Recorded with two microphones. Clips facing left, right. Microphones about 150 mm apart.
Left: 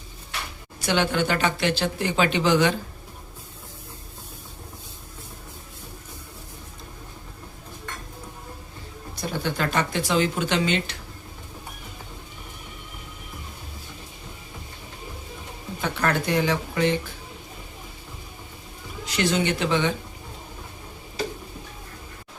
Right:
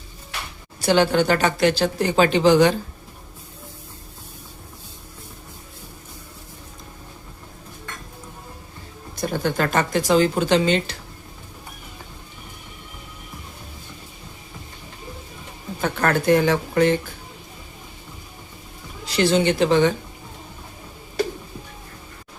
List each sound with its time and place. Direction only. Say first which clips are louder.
0.8 s speech: right 6 dB; 35° right (ahead or behind)
9.4 s speech: right 3 dB; 45° right (ahead or behind)
15.8 s speech: right 4 dB; 50° right (ahead or behind)
19.0 s speech: right 5 dB; 30° right (ahead or behind)